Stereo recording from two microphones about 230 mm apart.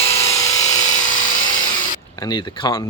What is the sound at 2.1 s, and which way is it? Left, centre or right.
Speech, centre.